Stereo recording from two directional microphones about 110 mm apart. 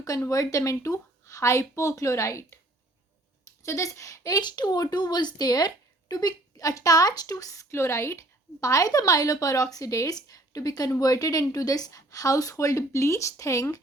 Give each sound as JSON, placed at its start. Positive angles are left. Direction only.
{"t": 0.0, "sound": "a woman's voice", "side_deg": 30}
{"t": 3.6, "sound": "speech", "side_deg": 30}